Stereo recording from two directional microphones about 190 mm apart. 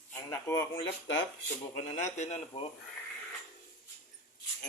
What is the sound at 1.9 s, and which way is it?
Speech, 40° left (ahead or behind).